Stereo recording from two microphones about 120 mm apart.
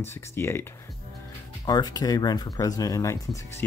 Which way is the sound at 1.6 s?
35° left (ahead or behind).